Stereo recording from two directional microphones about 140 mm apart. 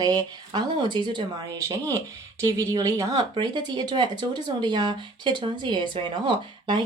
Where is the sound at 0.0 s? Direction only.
30° right (ahead or behind).